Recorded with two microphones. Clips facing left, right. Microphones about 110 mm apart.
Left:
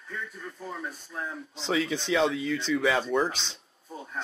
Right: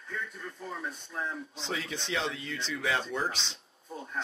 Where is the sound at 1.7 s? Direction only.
Centre (ahead or behind).